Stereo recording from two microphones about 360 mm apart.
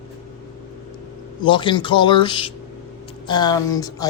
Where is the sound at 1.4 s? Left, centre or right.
Centre.